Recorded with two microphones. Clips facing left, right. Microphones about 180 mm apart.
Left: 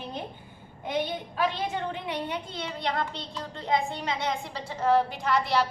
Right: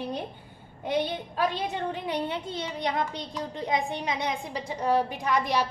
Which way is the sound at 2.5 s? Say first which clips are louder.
Right 1 dB; 20° right (ahead or behind).